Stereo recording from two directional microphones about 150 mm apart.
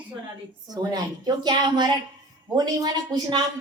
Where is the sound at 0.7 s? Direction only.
25° right (ahead or behind).